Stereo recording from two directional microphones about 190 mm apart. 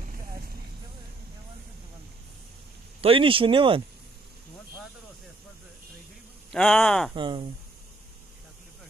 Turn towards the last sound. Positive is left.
turn(degrees=-25)  # may be behind; listen again after turning